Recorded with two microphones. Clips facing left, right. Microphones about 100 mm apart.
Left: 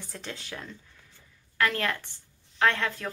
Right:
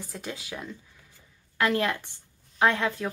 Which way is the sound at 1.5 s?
20° right (ahead or behind).